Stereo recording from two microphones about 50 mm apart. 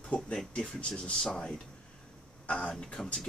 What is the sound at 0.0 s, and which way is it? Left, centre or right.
Speech, centre.